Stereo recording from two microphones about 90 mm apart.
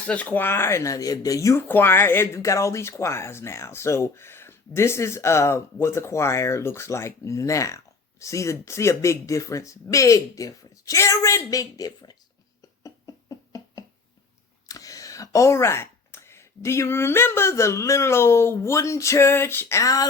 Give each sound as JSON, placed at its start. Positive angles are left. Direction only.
{"t": 0.1, "sound": "speech", "side_deg": 15}
{"t": 1.6, "sound": "speech", "side_deg": 25}
{"t": 12.8, "sound": "a sound", "side_deg": 40}
{"t": 14.7, "sound": "speech", "side_deg": 40}